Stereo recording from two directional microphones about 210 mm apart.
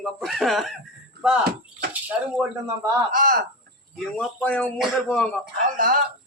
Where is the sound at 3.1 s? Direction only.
40° right (ahead or behind).